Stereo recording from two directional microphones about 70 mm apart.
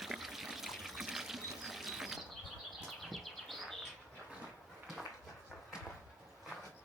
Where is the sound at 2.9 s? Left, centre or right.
Centre.